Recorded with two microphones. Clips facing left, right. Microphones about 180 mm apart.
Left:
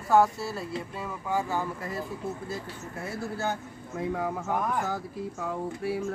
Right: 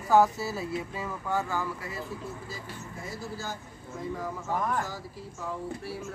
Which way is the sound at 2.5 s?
60° left (ahead or behind).